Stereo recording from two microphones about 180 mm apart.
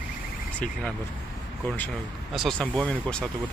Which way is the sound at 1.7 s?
10° left (ahead or behind).